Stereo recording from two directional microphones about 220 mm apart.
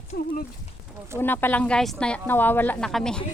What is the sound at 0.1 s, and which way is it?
Speech, 45° left (ahead or behind).